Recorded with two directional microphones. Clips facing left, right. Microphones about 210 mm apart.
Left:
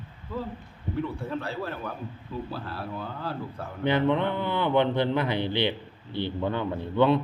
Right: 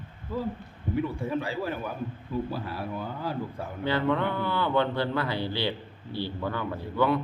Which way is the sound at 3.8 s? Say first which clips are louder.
Left 3 dB; 20° left (ahead or behind).